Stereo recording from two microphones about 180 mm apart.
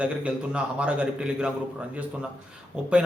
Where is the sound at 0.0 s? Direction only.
5° right (ahead or behind).